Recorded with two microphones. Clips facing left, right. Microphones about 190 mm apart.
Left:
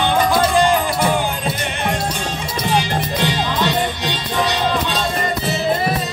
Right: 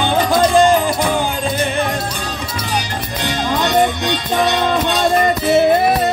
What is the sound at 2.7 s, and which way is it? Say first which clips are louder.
Music: left 4 dB; 45° right (ahead or behind).